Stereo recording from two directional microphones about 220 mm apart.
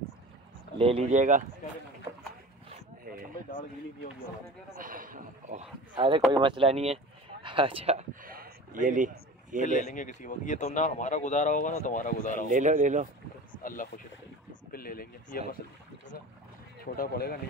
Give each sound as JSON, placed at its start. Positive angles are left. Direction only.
{"t": 0.7, "sound": "speech", "side_deg": -25}
{"t": 4.7, "sound": "a sound", "side_deg": -40}
{"t": 5.9, "sound": "speech", "side_deg": -20}
{"t": 8.3, "sound": "a sound", "side_deg": -40}
{"t": 9.6, "sound": "speech", "side_deg": 35}
{"t": 12.4, "sound": "speech", "side_deg": -35}
{"t": 13.6, "sound": "speech", "side_deg": 40}
{"t": 16.8, "sound": "speech", "side_deg": 40}